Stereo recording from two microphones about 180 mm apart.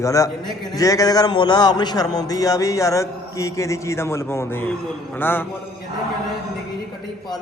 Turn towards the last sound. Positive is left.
turn(degrees=10)  # may be behind; listen again after turning